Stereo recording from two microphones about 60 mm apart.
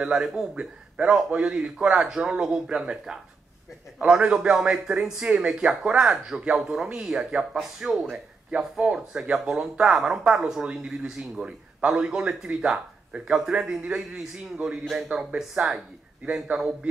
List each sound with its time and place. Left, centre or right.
0.0 s a man's voice: centre